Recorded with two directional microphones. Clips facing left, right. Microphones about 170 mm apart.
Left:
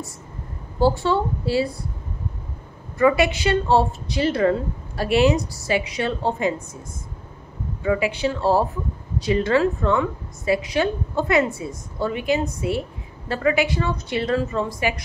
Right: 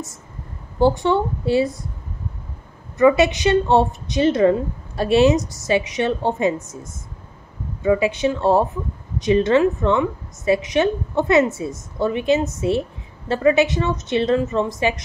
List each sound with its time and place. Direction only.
0.7 s a woman's voice: 20° right (ahead or behind)
3.0 s a woman's voice: 20° right (ahead or behind)
7.8 s a woman's voice: 25° right (ahead or behind)